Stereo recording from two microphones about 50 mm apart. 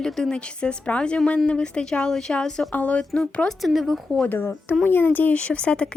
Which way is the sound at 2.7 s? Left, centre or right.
Left.